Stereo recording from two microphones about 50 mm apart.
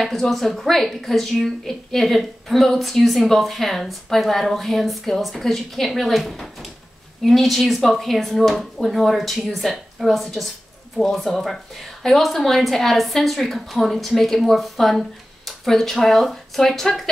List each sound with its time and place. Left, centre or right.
0.0 s a woman's voice: centre